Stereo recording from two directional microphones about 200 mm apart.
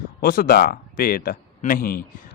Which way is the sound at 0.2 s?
45° left (ahead or behind).